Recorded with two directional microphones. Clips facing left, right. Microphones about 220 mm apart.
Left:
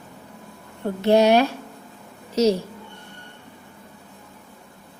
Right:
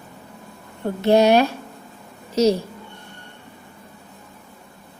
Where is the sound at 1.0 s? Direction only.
40° right (ahead or behind).